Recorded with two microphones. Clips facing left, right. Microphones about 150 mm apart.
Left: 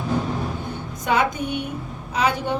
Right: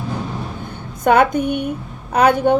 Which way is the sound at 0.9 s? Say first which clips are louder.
Right 8 dB; 55° right (ahead or behind).